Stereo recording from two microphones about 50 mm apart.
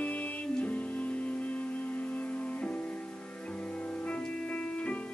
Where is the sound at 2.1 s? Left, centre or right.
Left.